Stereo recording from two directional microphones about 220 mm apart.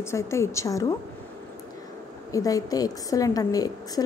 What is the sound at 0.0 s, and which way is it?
Speech, 10° left (ahead or behind).